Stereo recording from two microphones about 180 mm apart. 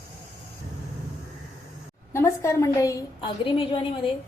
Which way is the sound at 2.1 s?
15° left (ahead or behind).